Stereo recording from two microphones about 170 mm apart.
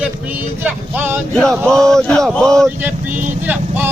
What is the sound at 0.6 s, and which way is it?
Speech, 10° right (ahead or behind).